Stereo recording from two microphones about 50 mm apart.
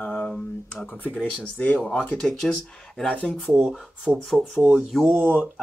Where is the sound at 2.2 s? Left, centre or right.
Centre.